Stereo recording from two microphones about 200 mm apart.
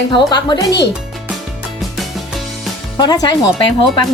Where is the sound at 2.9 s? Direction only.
20° left (ahead or behind).